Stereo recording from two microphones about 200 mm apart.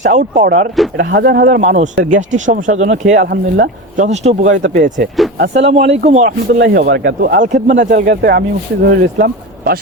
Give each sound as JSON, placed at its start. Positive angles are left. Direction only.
{"t": 0.0, "sound": "speech", "side_deg": -40}
{"t": 0.9, "sound": "speech", "side_deg": -55}
{"t": 5.4, "sound": "speech", "side_deg": -60}
{"t": 6.1, "sound": "speech", "side_deg": -40}
{"t": 7.8, "sound": "speech", "side_deg": -55}